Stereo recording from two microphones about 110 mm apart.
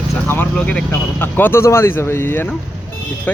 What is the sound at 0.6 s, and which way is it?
Speech, 10° left (ahead or behind).